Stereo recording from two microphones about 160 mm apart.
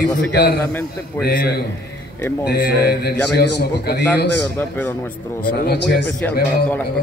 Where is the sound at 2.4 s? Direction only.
85° left.